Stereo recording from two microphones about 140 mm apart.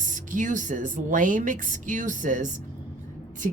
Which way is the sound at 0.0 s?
65° right (ahead or behind).